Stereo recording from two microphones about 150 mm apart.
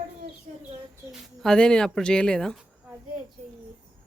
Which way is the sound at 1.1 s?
Centre (ahead or behind).